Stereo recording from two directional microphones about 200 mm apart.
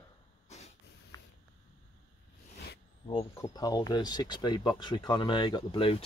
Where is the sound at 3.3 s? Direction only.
15° left (ahead or behind).